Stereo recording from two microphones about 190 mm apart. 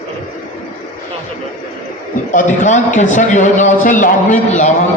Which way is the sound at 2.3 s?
40° left (ahead or behind).